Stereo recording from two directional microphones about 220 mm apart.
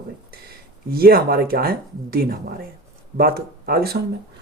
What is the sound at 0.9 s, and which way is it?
Speech, 45° right (ahead or behind).